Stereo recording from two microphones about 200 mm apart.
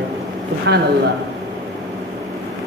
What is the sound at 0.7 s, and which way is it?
Speech, 60° right (ahead or behind).